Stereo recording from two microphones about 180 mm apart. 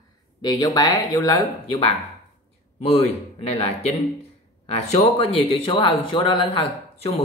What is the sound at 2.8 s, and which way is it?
Speech, 35° left (ahead or behind).